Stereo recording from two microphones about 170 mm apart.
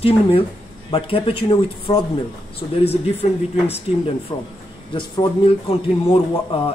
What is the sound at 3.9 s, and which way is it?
A man's voice, 35° left (ahead or behind).